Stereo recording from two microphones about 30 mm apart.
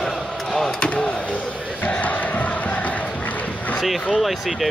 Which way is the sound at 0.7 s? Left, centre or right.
Left.